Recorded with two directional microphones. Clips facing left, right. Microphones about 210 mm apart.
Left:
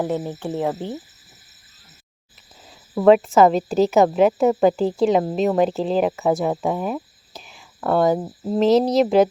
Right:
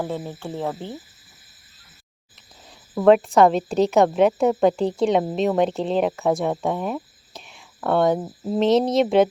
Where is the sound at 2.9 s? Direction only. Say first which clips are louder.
Left 1 dB; centre (ahead or behind).